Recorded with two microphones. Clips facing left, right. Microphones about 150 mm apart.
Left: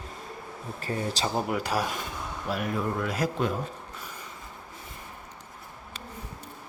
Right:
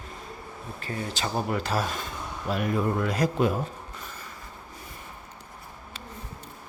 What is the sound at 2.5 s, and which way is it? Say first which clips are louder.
Speech: right 3 dB; centre (ahead or behind).